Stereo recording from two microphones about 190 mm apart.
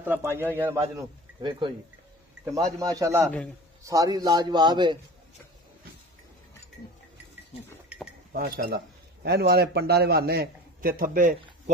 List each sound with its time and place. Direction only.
0.0 s a man's voice: 10° right (ahead or behind)
7.9 s chink: 5° right (ahead or behind)
8.3 s speech: 50° right (ahead or behind)